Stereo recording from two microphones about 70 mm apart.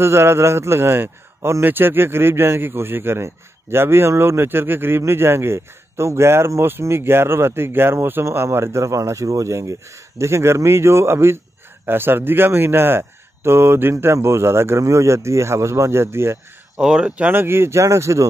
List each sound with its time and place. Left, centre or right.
0.0 s a man's voice: right
16.7 s speech: centre
17.2 s a man's voice: right